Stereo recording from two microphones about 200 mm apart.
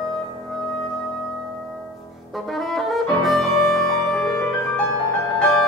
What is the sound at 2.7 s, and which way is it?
Music, centre (ahead or behind).